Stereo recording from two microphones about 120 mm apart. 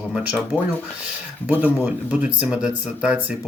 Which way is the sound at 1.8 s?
15° right (ahead or behind).